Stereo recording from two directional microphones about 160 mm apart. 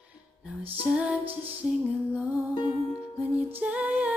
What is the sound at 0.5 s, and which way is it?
Music, 10° right (ahead or behind).